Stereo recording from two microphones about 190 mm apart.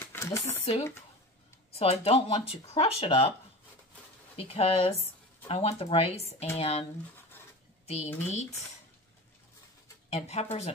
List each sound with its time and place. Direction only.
0.0 s a sound: 15° left (ahead or behind)
1.7 s speech: 30° left (ahead or behind)
4.4 s speech: 30° left (ahead or behind)
10.0 s speech: 35° left (ahead or behind)